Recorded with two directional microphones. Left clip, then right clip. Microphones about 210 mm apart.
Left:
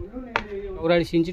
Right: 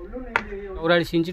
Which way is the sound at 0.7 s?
Centre (ahead or behind).